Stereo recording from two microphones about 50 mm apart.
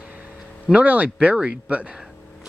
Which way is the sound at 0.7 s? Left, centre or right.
Right.